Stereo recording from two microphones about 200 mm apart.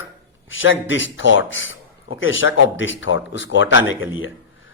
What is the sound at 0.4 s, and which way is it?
A man's voice, 75° left (ahead or behind).